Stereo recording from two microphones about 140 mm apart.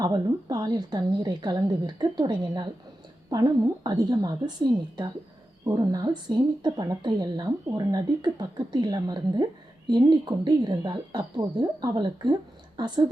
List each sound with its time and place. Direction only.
0.0 s a woman's voice: 30° right (ahead or behind)